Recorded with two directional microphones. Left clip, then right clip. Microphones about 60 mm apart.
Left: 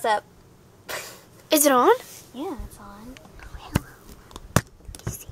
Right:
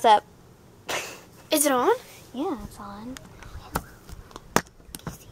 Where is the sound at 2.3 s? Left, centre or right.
Right.